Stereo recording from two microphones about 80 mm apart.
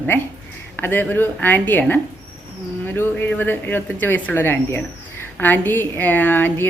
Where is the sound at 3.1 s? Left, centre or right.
Left.